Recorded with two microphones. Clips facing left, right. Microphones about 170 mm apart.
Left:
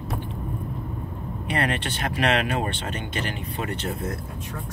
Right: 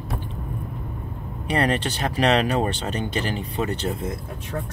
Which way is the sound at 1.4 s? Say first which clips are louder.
Right 4 dB; 35° right (ahead or behind).